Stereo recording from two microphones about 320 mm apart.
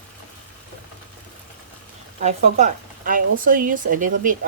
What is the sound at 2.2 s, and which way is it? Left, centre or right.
Speech, right.